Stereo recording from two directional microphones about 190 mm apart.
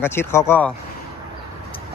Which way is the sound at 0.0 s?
10° left (ahead or behind).